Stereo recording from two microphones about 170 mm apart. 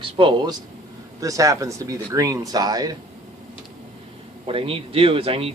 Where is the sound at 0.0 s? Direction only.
30° right (ahead or behind).